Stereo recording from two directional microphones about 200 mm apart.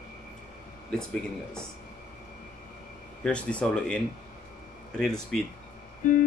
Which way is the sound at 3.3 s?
5° left (ahead or behind).